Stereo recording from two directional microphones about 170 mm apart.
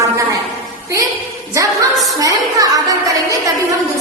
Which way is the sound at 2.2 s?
20° right (ahead or behind).